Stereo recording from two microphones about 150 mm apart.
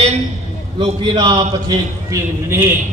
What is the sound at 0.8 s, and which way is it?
A man's voice, 30° right (ahead or behind).